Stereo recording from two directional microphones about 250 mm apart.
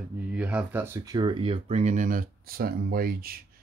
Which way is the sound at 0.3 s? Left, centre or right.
Centre.